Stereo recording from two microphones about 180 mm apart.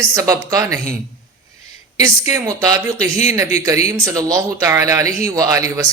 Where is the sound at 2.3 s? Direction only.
20° right (ahead or behind).